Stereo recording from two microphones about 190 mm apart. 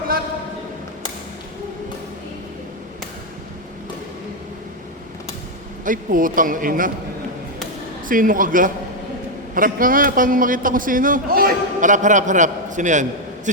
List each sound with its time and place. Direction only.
5.8 s a man's voice: 45° right (ahead or behind)
8.0 s a man's voice: 45° right (ahead or behind)